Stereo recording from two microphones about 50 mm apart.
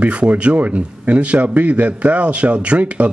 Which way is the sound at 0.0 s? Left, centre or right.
Right.